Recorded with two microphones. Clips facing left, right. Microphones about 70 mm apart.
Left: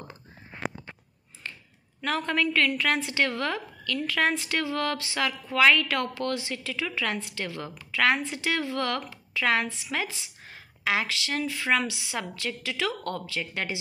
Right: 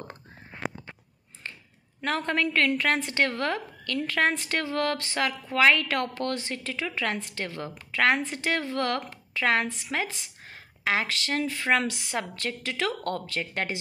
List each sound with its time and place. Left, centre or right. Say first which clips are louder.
2.0 s a woman's voice: even; right